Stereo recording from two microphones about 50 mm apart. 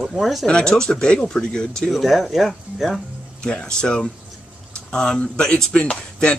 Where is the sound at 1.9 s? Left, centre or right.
Centre.